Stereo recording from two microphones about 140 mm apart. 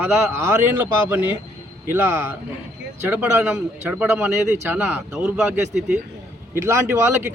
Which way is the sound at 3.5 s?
15° right (ahead or behind).